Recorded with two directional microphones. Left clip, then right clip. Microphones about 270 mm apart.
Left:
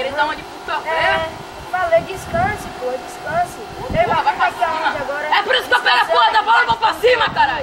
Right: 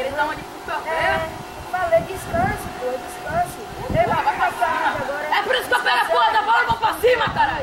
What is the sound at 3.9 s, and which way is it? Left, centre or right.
Chatter, centre.